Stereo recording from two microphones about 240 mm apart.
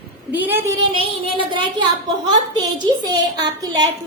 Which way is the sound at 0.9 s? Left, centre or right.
Right.